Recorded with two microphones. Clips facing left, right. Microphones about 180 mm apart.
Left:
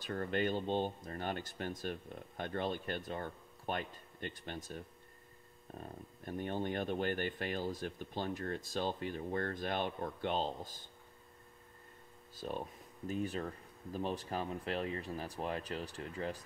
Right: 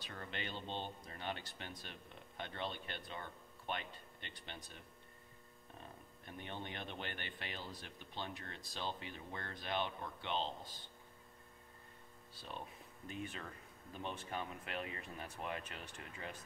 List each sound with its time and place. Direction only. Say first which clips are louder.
0.0 s speech: left 12 dB; 45° left (ahead or behind)
5.8 s speech: left 8 dB; 45° left (ahead or behind)
12.4 s speech: left 9 dB; 45° left (ahead or behind)